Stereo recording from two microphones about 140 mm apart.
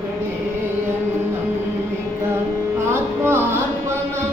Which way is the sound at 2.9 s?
15° right (ahead or behind).